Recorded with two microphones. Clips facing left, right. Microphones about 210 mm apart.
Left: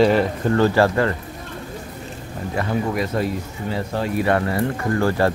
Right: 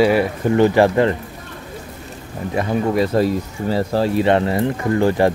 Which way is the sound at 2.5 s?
30° right (ahead or behind).